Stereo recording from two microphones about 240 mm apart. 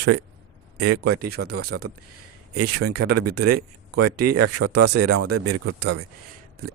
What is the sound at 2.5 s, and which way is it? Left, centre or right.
Speech, right.